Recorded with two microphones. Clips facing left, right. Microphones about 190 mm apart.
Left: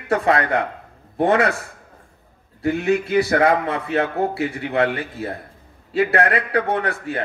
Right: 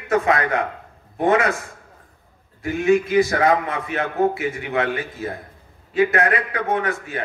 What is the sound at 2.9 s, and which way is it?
Speech, 65° left (ahead or behind).